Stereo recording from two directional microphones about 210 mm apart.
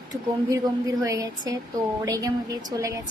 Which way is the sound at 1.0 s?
15° right (ahead or behind).